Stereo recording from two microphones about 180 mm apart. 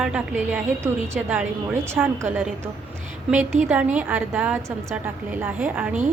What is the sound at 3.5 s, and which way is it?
Speech, 40° right (ahead or behind).